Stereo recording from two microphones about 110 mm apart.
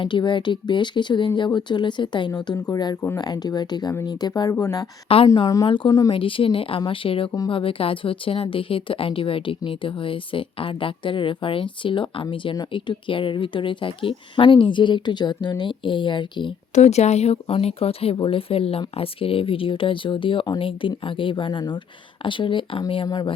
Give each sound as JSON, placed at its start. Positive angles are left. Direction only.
{"t": 0.0, "sound": "speech", "side_deg": 45}
{"t": 5.0, "sound": "a woman's voice", "side_deg": 60}
{"t": 5.6, "sound": "a woman's voice", "side_deg": 50}
{"t": 16.7, "sound": "a woman's voice", "side_deg": 90}